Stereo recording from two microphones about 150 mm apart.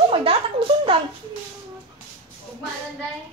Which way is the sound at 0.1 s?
40° right (ahead or behind).